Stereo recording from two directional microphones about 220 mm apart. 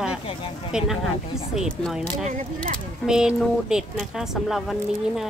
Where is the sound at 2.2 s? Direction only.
35° right (ahead or behind).